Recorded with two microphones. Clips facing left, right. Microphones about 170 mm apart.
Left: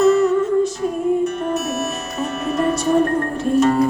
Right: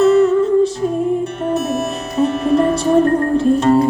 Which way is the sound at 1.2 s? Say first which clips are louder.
Right 1 dB; 30° right (ahead or behind).